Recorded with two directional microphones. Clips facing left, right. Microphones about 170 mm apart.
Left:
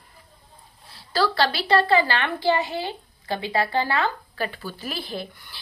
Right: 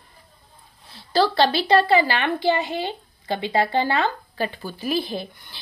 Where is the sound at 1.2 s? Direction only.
20° right (ahead or behind).